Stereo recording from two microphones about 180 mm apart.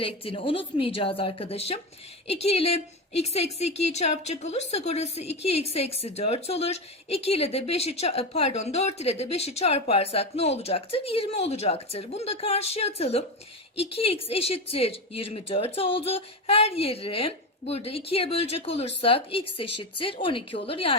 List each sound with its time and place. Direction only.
0.0 s a woman's voice: 30° left (ahead or behind)